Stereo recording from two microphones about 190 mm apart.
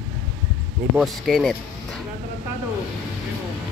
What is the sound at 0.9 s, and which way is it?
Speech, centre (ahead or behind).